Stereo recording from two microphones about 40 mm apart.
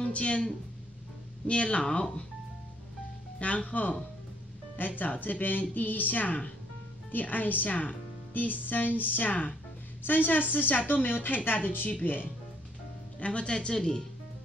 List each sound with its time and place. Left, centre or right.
0.0 s speech: left
3.3 s speech: left
4.7 s a woman's voice: left
13.2 s speech: left
13.7 s speech: centre